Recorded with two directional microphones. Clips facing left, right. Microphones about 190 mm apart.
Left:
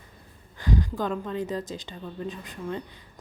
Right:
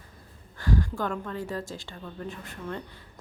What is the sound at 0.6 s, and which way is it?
Speech, 15° left (ahead or behind).